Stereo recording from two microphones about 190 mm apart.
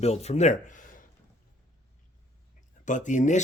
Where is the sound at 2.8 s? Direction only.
40° left (ahead or behind).